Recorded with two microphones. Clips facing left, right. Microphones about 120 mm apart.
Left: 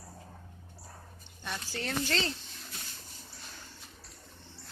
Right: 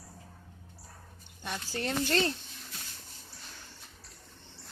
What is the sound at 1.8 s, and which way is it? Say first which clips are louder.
Speech: right 2 dB; 20° right (ahead or behind).